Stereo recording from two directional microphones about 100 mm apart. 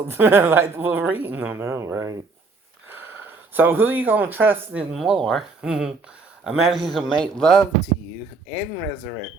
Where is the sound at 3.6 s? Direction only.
20° right (ahead or behind).